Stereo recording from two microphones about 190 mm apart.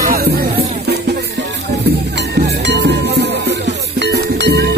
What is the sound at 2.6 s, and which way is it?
Music, 65° right (ahead or behind).